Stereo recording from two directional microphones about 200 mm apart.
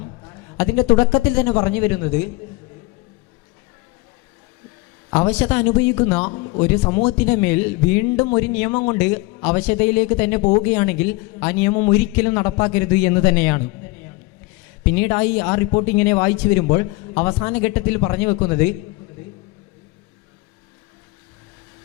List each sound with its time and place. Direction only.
0.0 s a sound: 20° left (ahead or behind)
0.5 s a man's voice: 10° left (ahead or behind)
5.1 s a man's voice: 10° left (ahead or behind)
6.3 s a man's voice: 25° left (ahead or behind)
6.6 s a man's voice: 10° left (ahead or behind)
14.9 s a man's voice: 10° left (ahead or behind)